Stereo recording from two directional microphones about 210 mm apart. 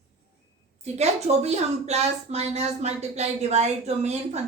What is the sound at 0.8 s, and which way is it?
A woman's voice, 30° right (ahead or behind).